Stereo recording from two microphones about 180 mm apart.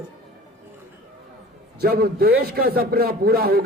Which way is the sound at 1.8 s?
60° right (ahead or behind).